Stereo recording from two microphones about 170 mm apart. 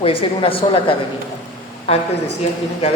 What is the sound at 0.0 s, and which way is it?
Speech, 30° left (ahead or behind).